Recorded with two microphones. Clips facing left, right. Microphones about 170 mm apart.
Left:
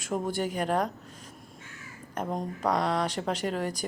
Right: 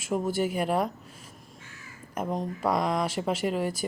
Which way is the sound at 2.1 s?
5° right (ahead or behind).